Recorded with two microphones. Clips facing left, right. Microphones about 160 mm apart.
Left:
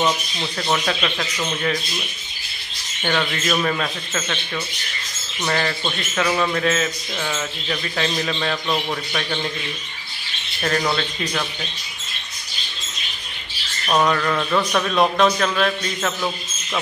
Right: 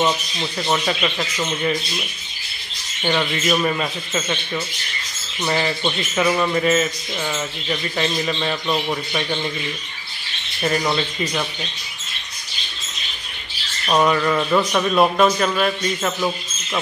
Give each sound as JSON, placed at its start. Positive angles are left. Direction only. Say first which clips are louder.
{"t": 0.0, "sound": "speech", "louder": "right 1 dB", "side_deg": -5}
{"t": 5.4, "sound": "speech", "louder": "right 2 dB", "side_deg": -10}
{"t": 10.6, "sound": "speech", "louder": "right 1 dB", "side_deg": -5}
{"t": 13.8, "sound": "speech", "louder": "right 2 dB", "side_deg": -5}